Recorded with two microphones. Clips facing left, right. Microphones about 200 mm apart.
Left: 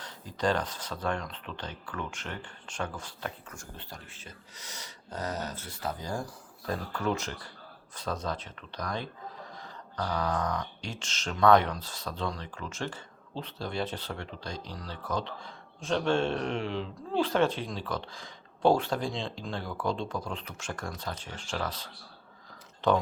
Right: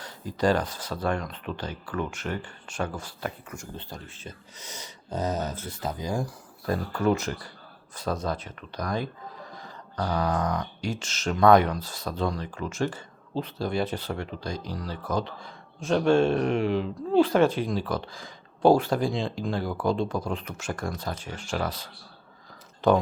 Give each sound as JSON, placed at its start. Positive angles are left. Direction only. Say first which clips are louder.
{"t": 0.0, "sound": "speech", "louder": "right 5 dB", "side_deg": -10}
{"t": 3.8, "sound": "speech", "louder": "right 6 dB", "side_deg": -20}